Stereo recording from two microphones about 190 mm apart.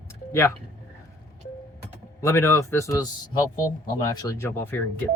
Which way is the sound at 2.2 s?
15° left (ahead or behind).